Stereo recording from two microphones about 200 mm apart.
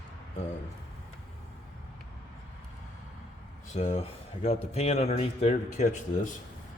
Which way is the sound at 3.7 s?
35° left (ahead or behind).